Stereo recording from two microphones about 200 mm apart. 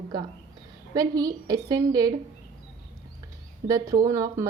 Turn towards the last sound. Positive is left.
turn(degrees=-15)  # may be behind; listen again after turning